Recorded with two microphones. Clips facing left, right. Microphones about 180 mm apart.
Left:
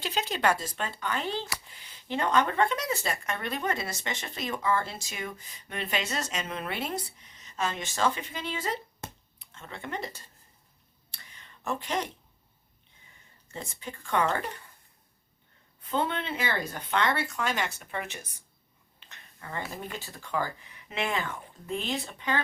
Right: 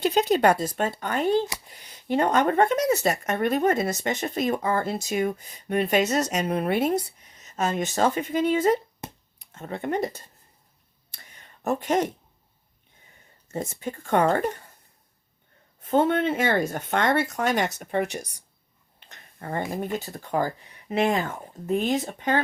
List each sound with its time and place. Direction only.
0.0 s speech: 50° right (ahead or behind)
11.1 s a sound: 45° right (ahead or behind)
13.5 s speech: 45° right (ahead or behind)
15.8 s speech: 45° right (ahead or behind)
19.0 s a sound: 40° right (ahead or behind)
19.7 s speech: 45° right (ahead or behind)